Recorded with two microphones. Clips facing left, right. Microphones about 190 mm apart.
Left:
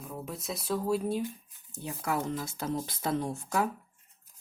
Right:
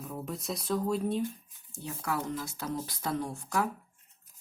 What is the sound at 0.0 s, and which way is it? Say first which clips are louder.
Speech: right 1 dB; centre (ahead or behind).